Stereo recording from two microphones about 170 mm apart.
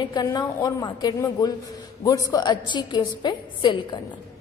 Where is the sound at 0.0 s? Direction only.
25° left (ahead or behind).